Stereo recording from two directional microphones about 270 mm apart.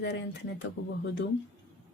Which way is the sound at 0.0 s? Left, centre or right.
Left.